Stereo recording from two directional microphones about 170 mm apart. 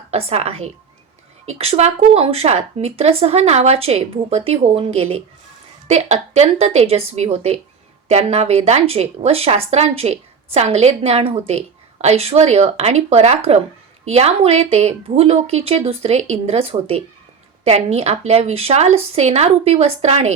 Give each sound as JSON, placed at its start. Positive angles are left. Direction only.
{"t": 0.1, "sound": "a woman's voice", "side_deg": -35}